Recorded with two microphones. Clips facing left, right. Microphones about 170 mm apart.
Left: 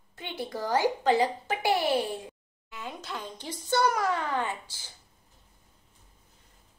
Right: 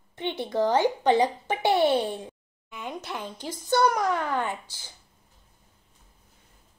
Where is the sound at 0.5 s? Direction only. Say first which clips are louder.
Right 4 dB; 20° right (ahead or behind).